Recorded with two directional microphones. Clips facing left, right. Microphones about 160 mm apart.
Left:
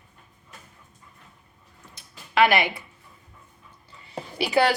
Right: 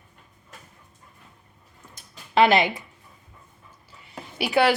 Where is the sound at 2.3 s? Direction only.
25° right (ahead or behind).